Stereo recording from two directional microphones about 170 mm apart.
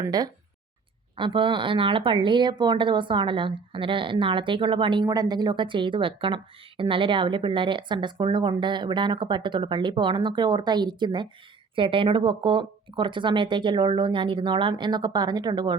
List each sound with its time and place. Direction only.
0.0 s speech: 20° right (ahead or behind)